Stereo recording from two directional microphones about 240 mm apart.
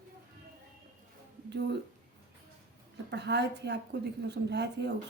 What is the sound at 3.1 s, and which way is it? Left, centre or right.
Speech, right.